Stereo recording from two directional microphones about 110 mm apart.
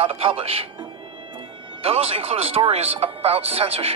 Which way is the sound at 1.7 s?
60° right (ahead or behind).